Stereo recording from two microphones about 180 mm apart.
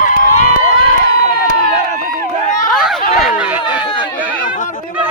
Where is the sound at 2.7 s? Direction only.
Centre (ahead or behind).